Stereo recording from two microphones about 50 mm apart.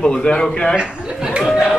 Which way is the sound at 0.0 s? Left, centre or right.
Left.